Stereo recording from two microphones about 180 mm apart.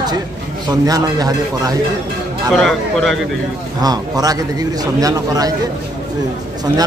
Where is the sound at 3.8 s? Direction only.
20° right (ahead or behind).